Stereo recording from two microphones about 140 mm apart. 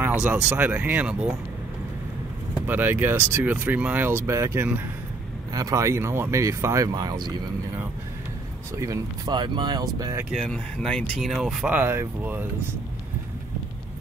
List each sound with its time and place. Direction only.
0.0 s speech: 10° right (ahead or behind)
2.6 s speech: 15° right (ahead or behind)
8.7 s speech: 25° right (ahead or behind)
10.3 s speech: 5° left (ahead or behind)
11.7 s speech: 15° right (ahead or behind)